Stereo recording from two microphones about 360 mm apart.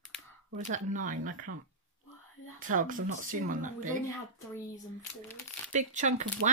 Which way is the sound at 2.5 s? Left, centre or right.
Right.